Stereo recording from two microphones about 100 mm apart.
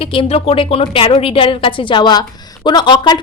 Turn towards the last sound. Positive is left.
turn(degrees=45)  # may be behind; listen again after turning